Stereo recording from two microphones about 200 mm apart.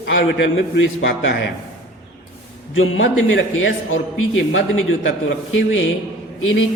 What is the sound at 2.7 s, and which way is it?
A man's voice, 75° left (ahead or behind).